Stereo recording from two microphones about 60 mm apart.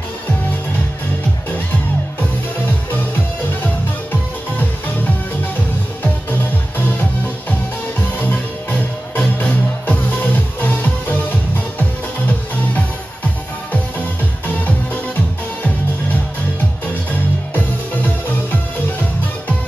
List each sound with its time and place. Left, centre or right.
3.6 s music: left
8.2 s music: left